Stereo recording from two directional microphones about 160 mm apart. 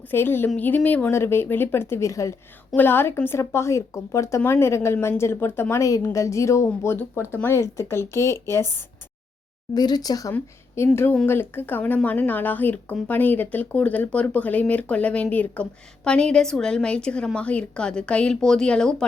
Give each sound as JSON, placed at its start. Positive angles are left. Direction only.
{"t": 0.1, "sound": "speech", "side_deg": 15}
{"t": 9.7, "sound": "a woman's voice", "side_deg": 25}